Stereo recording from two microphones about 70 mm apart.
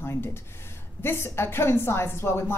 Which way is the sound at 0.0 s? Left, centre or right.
Left.